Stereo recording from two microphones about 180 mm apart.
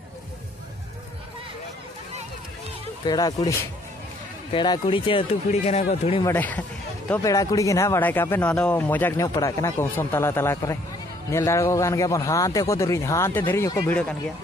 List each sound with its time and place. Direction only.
3.1 s speech: 20° left (ahead or behind)
6.2 s speech: 10° left (ahead or behind)